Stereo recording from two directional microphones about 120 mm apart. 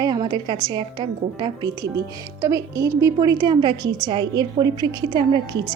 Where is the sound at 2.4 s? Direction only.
25° right (ahead or behind).